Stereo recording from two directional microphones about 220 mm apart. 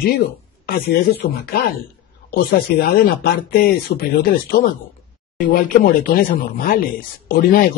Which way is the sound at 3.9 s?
40° left (ahead or behind).